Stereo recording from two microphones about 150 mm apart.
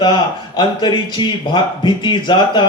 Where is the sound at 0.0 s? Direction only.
30° left (ahead or behind).